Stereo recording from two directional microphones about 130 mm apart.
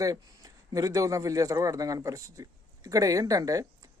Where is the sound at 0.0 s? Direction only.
25° right (ahead or behind).